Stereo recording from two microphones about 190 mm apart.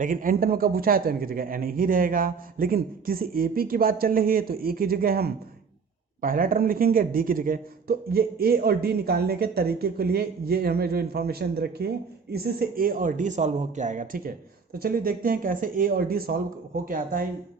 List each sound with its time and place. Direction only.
0.0 s a man's voice: 45° right (ahead or behind)